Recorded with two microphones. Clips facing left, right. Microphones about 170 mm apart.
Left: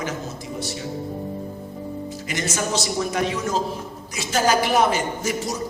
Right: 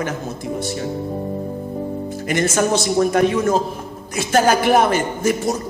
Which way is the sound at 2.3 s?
55° right (ahead or behind).